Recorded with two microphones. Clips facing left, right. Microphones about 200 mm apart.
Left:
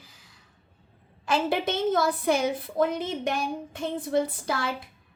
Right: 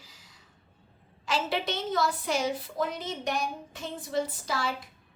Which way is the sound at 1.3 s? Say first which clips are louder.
Left 4 dB; 55° left (ahead or behind).